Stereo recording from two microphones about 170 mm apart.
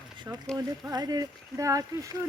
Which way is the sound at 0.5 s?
20° right (ahead or behind).